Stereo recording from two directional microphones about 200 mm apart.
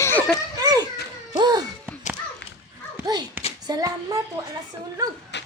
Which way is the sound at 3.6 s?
20° right (ahead or behind).